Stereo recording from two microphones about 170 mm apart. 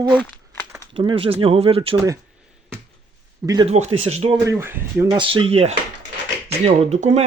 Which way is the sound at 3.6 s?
40° right (ahead or behind).